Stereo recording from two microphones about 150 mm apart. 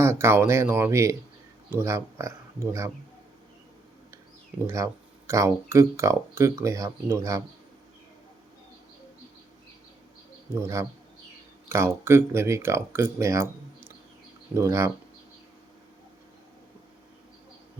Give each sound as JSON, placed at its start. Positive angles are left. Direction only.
{"t": 0.0, "sound": "speech", "side_deg": -15}
{"t": 4.6, "sound": "speech", "side_deg": -20}
{"t": 10.6, "sound": "speech", "side_deg": -20}